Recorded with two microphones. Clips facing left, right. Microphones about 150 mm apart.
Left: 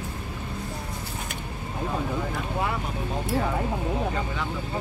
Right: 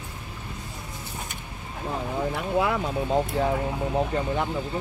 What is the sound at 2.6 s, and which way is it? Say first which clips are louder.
Vehicle: right 5 dB; 90° right.